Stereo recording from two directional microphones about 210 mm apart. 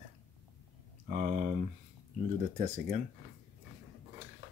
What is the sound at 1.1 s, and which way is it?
Speech, 35° right (ahead or behind).